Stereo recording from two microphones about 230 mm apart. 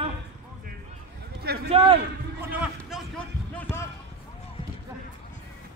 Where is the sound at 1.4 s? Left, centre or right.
Right.